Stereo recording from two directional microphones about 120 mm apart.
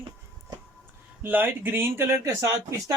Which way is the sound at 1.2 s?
15° right (ahead or behind).